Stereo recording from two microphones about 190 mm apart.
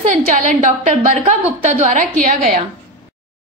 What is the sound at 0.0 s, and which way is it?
A woman's voice, 40° right (ahead or behind).